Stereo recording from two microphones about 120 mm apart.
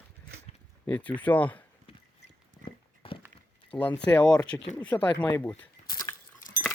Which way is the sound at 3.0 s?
50° left (ahead or behind).